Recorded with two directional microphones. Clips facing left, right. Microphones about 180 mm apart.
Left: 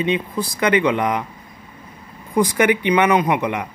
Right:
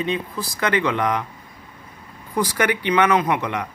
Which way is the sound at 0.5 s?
15° left (ahead or behind).